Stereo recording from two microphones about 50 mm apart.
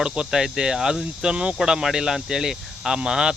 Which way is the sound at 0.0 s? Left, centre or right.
Centre.